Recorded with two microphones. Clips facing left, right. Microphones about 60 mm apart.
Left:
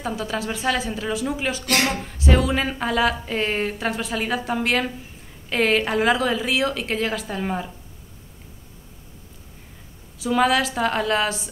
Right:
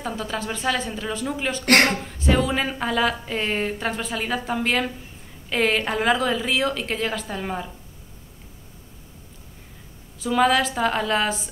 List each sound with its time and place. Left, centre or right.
0.0 s speech: centre
1.7 s speech: right
2.0 s speech: centre
10.1 s speech: centre